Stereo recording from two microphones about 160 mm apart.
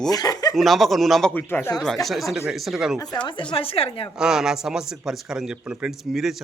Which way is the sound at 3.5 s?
35° left (ahead or behind).